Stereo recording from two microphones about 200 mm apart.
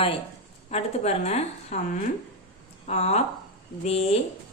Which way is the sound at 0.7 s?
30° left (ahead or behind).